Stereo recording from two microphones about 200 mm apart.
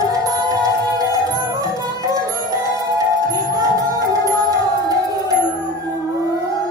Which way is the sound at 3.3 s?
20° right (ahead or behind).